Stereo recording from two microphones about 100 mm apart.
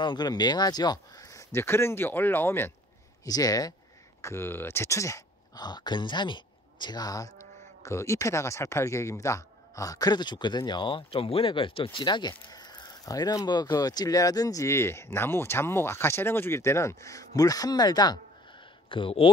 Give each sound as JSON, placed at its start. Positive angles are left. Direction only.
{"t": 0.0, "sound": "speech", "side_deg": 45}
{"t": 3.3, "sound": "speech", "side_deg": 40}
{"t": 4.2, "sound": "speech", "side_deg": 25}
{"t": 5.6, "sound": "speech", "side_deg": 45}
{"t": 18.9, "sound": "speech", "side_deg": 60}